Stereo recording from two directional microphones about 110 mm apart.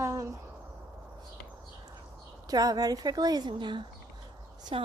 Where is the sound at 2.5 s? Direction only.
35° right (ahead or behind).